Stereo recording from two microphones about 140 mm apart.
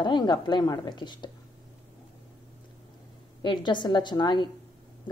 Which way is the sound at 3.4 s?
35° left (ahead or behind).